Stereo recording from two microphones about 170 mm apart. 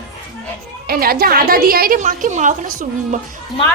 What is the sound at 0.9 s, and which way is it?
A woman's voice, 60° right (ahead or behind).